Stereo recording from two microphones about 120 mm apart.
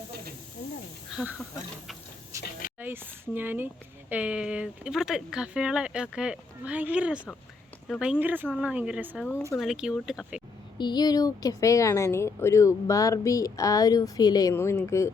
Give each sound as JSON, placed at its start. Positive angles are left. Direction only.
{"t": 1.1, "sound": "speech", "side_deg": -10}
{"t": 2.8, "sound": "speech", "side_deg": -15}
{"t": 10.8, "sound": "speech", "side_deg": 35}
{"t": 14.5, "sound": "speech", "side_deg": 20}